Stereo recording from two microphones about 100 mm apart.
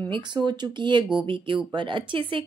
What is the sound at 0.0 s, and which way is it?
A woman's voice, 45° right (ahead or behind).